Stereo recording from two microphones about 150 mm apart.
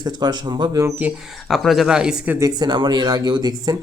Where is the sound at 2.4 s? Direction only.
25° right (ahead or behind).